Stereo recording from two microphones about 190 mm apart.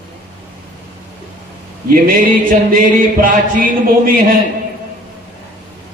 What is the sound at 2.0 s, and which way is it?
Music, 50° right (ahead or behind).